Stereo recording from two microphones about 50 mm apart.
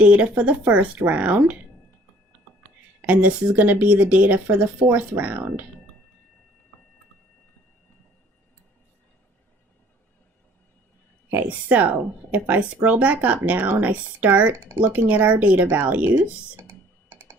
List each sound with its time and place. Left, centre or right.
0.0 s speech: right
3.1 s speech: right
11.3 s speech: right
14.5 s speech: right
14.8 s speech: right
16.6 s computer keyboard: right